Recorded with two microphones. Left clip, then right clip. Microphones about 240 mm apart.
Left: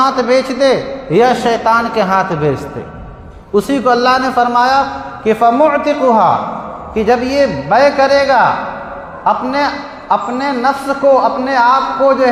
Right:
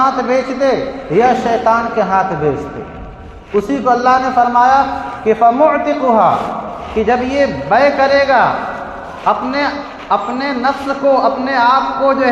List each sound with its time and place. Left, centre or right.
0.0 s a man's voice: left
3.7 s a man's voice: left